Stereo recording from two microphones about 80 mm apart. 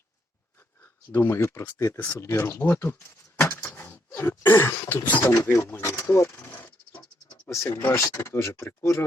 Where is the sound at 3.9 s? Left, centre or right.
Left.